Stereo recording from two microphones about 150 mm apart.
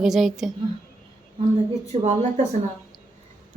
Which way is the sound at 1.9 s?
50° right (ahead or behind).